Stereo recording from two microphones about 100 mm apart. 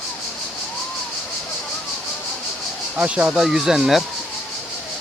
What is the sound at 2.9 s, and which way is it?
Speech, 10° right (ahead or behind).